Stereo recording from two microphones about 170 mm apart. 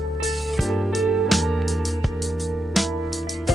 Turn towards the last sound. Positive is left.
turn(degrees=0)  # may be behind; listen again after turning